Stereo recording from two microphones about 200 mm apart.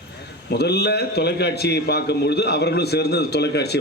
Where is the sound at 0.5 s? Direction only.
55° left (ahead or behind).